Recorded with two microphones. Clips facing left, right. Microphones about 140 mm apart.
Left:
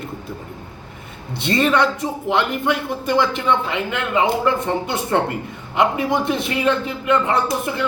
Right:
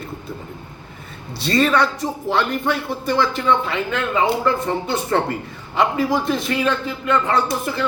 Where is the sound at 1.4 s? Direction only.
20° left (ahead or behind).